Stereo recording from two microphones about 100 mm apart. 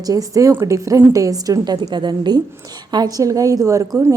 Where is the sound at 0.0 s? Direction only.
35° right (ahead or behind).